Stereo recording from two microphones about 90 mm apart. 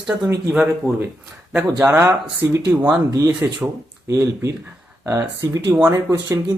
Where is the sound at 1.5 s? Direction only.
25° right (ahead or behind).